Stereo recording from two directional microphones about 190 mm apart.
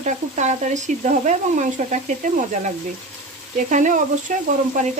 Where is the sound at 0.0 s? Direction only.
40° right (ahead or behind).